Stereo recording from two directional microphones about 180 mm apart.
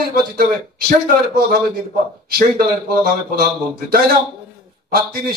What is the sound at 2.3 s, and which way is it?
A man's voice, 55° right (ahead or behind).